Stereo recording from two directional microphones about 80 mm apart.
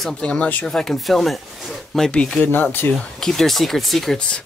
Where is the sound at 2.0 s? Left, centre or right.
Centre.